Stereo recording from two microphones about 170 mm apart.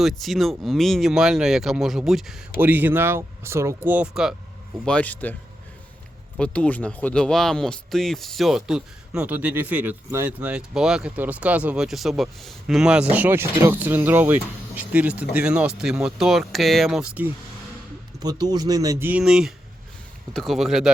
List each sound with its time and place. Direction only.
0.0 s speech: centre (ahead or behind)
4.9 s a man's voice: 10° left (ahead or behind)
18.2 s speech: 25° right (ahead or behind); by 20.9 s centre (ahead or behind)